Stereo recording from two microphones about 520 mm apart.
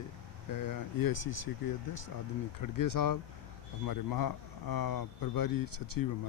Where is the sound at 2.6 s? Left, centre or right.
Left.